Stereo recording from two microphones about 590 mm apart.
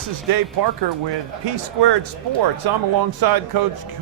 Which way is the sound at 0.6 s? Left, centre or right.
Right.